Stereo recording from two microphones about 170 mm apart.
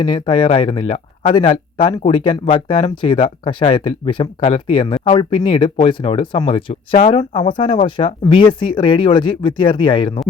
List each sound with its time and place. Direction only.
0.0 s speech: 30° left (ahead or behind)